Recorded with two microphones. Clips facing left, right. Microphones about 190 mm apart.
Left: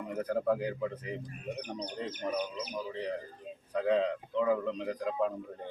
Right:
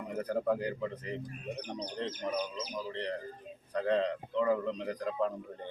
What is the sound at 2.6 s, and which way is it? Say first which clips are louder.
A man's voice: left 1 dB; 5° left (ahead or behind).